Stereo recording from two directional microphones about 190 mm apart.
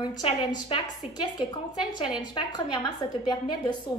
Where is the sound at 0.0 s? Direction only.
20° left (ahead or behind).